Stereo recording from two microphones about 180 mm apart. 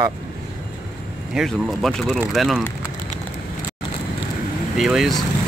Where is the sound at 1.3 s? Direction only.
Centre (ahead or behind).